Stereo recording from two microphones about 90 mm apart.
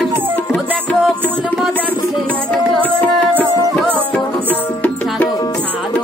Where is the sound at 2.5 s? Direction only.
15° left (ahead or behind).